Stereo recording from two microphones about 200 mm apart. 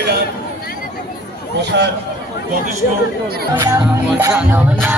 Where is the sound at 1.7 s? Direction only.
60° right (ahead or behind).